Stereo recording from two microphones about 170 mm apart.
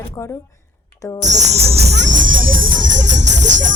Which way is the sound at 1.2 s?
40° right (ahead or behind).